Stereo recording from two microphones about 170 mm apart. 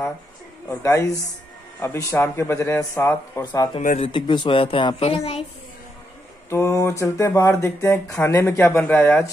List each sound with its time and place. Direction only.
0.7 s speech: 15° left (ahead or behind)
4.0 s a woman's voice: 30° left (ahead or behind)
6.5 s speech: 15° left (ahead or behind)